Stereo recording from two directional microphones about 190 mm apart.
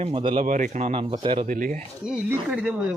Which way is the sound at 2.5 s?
5° right (ahead or behind).